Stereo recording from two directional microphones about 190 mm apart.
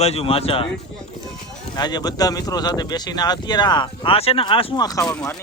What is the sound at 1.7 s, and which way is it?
Speech, 20° left (ahead or behind).